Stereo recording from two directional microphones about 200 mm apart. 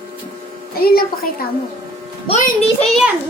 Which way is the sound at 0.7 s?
50° left (ahead or behind).